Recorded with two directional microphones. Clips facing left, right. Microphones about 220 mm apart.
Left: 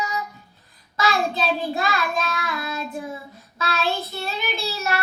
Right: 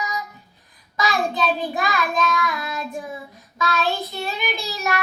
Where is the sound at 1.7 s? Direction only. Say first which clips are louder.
Even; 15° right (ahead or behind).